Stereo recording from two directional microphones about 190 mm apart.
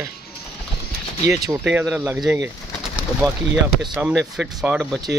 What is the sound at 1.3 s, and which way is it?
Speech, 15° right (ahead or behind).